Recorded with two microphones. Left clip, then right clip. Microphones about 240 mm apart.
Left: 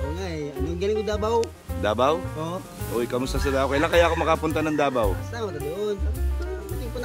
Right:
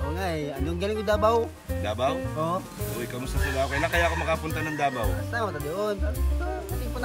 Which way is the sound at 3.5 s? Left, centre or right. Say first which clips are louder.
Left 5 dB; centre.